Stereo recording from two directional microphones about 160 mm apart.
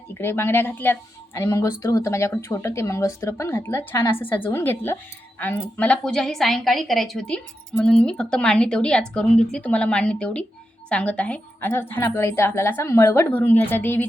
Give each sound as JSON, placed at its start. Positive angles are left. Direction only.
{"t": 0.1, "sound": "a woman's voice", "side_deg": 15}